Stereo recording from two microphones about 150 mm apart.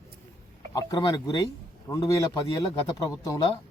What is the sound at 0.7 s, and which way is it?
A man's voice, 25° left (ahead or behind).